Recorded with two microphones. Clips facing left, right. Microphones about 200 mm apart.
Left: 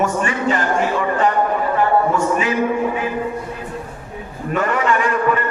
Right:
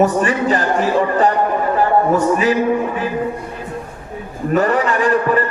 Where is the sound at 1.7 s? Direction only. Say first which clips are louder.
Right 2 dB; 35° right (ahead or behind).